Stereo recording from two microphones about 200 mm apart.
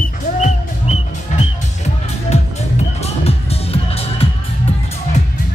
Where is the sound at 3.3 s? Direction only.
30° left (ahead or behind).